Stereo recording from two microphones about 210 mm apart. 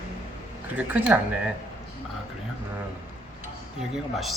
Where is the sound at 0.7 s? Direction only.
10° right (ahead or behind).